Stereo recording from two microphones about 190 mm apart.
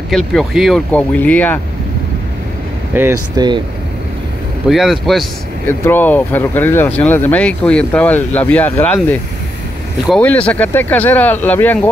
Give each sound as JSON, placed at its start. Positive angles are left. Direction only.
{"t": 0.1, "sound": "speech", "side_deg": 0}
{"t": 2.9, "sound": "speech", "side_deg": -15}
{"t": 4.6, "sound": "speech", "side_deg": 0}
{"t": 5.7, "sound": "speech", "side_deg": 10}